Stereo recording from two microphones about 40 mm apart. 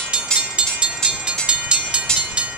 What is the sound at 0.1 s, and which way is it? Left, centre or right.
Train, right.